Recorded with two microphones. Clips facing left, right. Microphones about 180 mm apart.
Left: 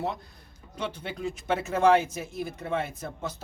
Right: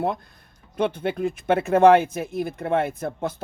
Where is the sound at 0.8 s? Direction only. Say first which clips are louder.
Right 10 dB; 55° right (ahead or behind).